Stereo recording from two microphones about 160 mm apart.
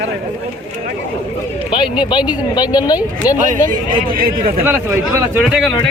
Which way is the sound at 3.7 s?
60° right (ahead or behind).